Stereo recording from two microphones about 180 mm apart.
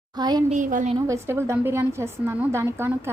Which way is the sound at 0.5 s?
45° right (ahead or behind).